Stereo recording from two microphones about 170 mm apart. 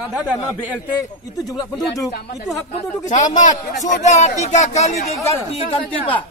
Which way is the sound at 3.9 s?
45° left (ahead or behind).